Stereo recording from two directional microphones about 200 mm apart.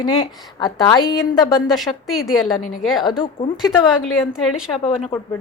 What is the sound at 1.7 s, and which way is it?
Speech, centre (ahead or behind).